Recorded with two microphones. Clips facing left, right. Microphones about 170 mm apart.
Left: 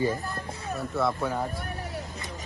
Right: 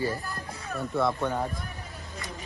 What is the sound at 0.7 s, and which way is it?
Speech, centre (ahead or behind).